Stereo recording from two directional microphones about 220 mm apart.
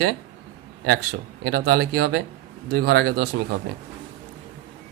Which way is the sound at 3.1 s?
40° right (ahead or behind).